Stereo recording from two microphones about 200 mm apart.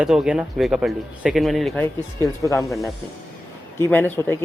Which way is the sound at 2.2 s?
15° left (ahead or behind).